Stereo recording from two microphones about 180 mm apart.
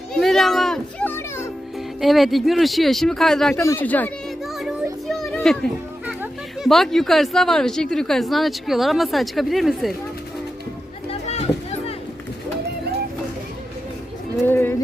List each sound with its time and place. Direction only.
0.1 s children playing: centre (ahead or behind)
2.0 s speech: centre (ahead or behind)
3.6 s speech: 15° left (ahead or behind)
5.0 s children playing: centre (ahead or behind)
6.6 s speech: centre (ahead or behind)
11.1 s a sound: 35° left (ahead or behind)
14.4 s a sound: 10° left (ahead or behind)